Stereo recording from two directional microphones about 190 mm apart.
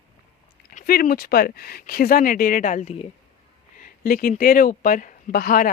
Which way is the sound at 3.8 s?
50° left (ahead or behind).